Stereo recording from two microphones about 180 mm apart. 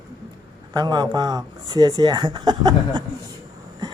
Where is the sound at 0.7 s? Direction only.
25° right (ahead or behind).